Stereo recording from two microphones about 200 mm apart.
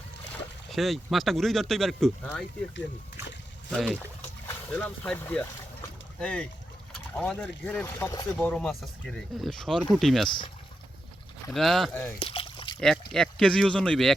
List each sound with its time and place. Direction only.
0.7 s speech: centre (ahead or behind)
3.7 s speech: centre (ahead or behind)
4.2 s boat: 10° left (ahead or behind)
6.1 s speech: 5° left (ahead or behind)
11.5 s speech: centre (ahead or behind)
12.2 s a sound: 25° left (ahead or behind)
12.8 s speech: centre (ahead or behind)